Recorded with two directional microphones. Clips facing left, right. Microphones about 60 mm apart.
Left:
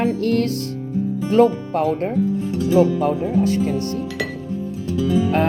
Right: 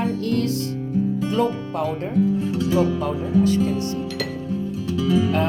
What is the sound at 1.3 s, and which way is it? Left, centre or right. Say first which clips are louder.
Speech: left 10 dB; left.